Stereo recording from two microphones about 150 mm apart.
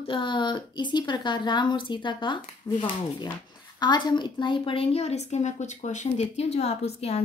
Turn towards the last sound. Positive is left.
turn(degrees=45)  # may be behind; listen again after turning